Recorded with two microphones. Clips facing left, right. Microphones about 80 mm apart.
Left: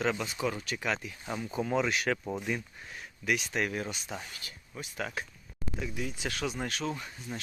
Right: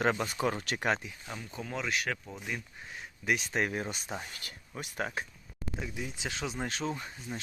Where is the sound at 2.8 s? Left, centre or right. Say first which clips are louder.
Right 2 dB; centre.